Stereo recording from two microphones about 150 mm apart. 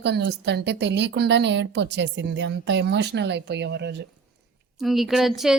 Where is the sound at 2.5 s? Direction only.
90° right.